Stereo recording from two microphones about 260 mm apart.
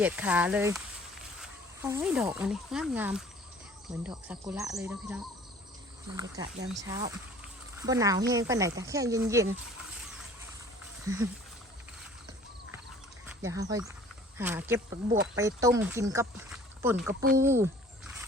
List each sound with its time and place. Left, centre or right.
0.0 s speech: centre
11.1 s speech: centre
13.4 s speech: centre